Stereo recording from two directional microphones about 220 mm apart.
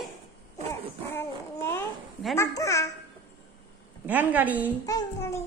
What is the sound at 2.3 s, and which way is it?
Speech, 15° left (ahead or behind).